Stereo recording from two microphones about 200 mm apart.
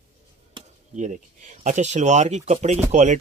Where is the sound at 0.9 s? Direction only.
40° right (ahead or behind).